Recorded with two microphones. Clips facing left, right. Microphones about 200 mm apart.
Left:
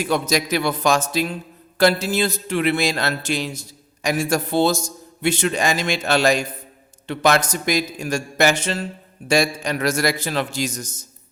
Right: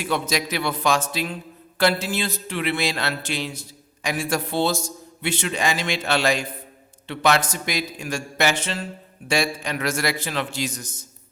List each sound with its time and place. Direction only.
0.0 s a man's voice: 45° left (ahead or behind)